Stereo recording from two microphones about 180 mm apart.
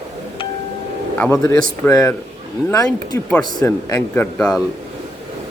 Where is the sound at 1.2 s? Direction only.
10° left (ahead or behind).